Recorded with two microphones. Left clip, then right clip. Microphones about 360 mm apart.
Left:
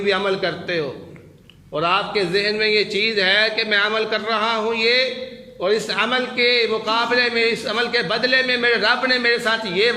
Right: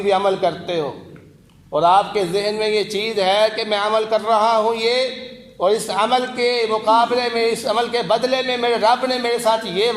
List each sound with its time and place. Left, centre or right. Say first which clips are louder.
0.0 s a man's voice: right 3 dB; centre